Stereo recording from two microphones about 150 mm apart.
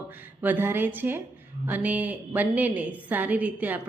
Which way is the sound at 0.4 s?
15° right (ahead or behind).